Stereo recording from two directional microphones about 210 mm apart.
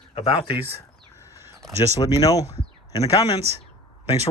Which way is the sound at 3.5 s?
30° right (ahead or behind).